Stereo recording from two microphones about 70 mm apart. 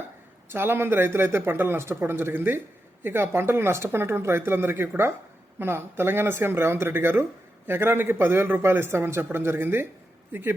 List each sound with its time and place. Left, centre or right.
0.5 s speech: right